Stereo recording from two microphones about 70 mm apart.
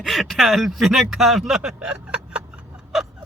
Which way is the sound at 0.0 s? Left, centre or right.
Centre.